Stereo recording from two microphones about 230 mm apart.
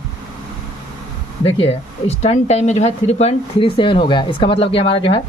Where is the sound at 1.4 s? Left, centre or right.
Left.